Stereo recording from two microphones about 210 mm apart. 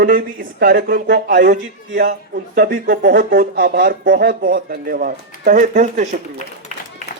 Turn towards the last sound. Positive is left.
turn(degrees=-35)  # may be behind; listen again after turning